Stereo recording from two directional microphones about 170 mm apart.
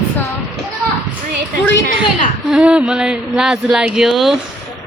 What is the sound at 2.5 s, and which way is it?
Speech, 5° right (ahead or behind).